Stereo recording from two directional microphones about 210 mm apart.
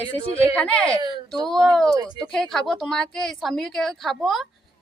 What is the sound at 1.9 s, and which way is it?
Speech, 15° right (ahead or behind).